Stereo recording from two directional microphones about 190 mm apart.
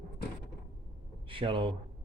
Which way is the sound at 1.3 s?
25° right (ahead or behind).